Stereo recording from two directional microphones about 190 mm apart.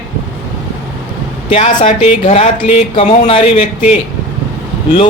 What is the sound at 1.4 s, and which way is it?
Speech, 35° left (ahead or behind).